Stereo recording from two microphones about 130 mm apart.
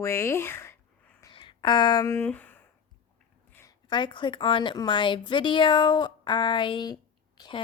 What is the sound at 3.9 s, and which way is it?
A woman's voice, 35° left (ahead or behind).